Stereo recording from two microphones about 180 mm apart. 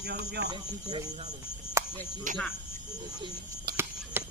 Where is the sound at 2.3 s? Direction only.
45° right (ahead or behind).